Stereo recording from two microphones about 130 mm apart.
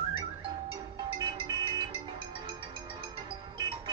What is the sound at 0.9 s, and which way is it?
Music, 40° right (ahead or behind).